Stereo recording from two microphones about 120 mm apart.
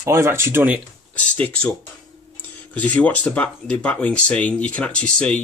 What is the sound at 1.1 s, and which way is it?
Speech, 10° left (ahead or behind).